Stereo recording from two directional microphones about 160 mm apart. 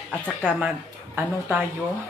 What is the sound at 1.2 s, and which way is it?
Speech, 10° right (ahead or behind).